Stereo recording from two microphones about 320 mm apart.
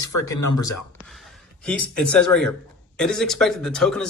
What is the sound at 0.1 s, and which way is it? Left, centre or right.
Speech, left.